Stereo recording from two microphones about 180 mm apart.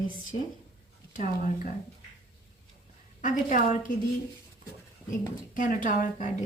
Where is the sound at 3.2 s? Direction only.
45° left (ahead or behind).